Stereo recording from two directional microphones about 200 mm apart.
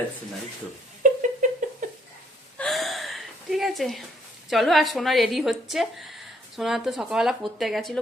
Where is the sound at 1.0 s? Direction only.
40° right (ahead or behind).